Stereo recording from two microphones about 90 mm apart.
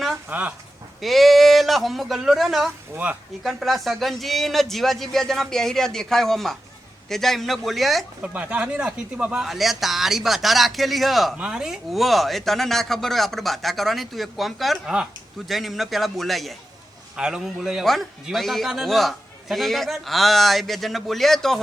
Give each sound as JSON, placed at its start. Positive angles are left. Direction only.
{"t": 0.3, "sound": "speech", "side_deg": -20}
{"t": 1.0, "sound": "a man's voice", "side_deg": 0}
{"t": 2.9, "sound": "speech", "side_deg": -15}
{"t": 3.4, "sound": "a man's voice", "side_deg": 0}
{"t": 8.2, "sound": "a man's voice", "side_deg": -15}